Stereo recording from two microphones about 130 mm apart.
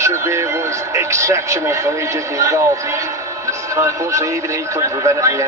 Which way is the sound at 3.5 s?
25° right (ahead or behind).